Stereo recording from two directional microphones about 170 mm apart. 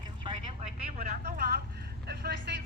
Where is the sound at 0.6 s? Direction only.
40° right (ahead or behind).